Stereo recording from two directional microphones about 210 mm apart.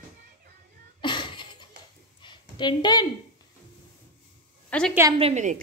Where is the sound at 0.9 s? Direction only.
20° left (ahead or behind).